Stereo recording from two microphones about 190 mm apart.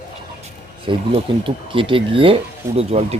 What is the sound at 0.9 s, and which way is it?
Speech, 30° right (ahead or behind).